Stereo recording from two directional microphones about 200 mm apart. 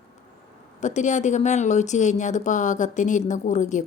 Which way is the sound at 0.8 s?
40° left (ahead or behind).